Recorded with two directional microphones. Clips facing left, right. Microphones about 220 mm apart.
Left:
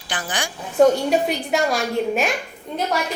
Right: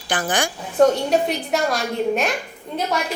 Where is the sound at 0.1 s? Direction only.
50° right (ahead or behind).